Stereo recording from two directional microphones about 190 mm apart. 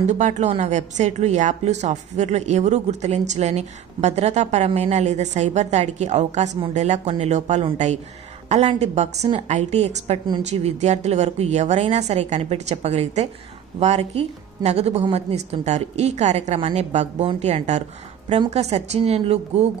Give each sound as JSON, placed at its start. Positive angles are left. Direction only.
{"t": 0.0, "sound": "a woman's voice", "side_deg": -40}